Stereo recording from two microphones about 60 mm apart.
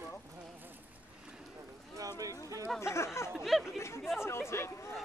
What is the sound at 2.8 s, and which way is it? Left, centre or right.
Speech, left.